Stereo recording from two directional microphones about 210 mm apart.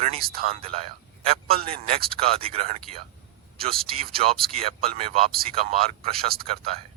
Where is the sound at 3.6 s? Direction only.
45° right (ahead or behind).